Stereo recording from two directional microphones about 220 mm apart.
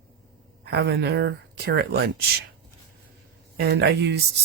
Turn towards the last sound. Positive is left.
turn(degrees=-50)  # may be behind; listen again after turning